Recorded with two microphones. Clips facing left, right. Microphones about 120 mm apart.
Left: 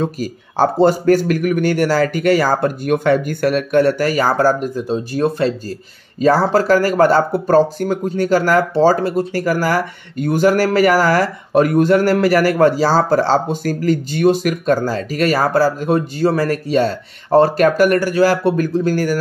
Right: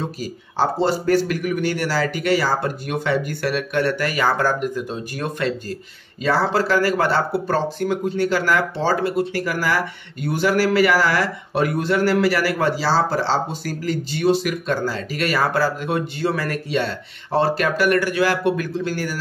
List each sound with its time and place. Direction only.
0.0 s speech: 50° left (ahead or behind)